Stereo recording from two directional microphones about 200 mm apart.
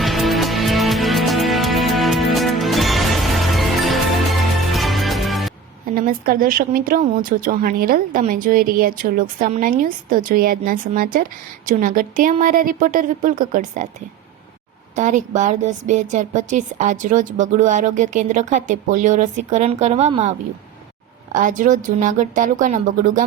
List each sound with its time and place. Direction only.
0.0 s music: centre (ahead or behind)
5.9 s speech: 45° right (ahead or behind)
14.9 s a woman's voice: 35° right (ahead or behind)
21.3 s a woman's voice: 40° right (ahead or behind)